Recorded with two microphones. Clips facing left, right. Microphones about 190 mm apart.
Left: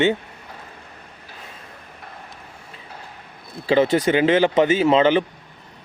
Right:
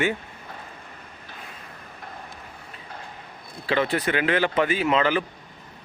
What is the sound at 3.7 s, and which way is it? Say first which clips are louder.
Speech: left 7 dB; 25° left (ahead or behind).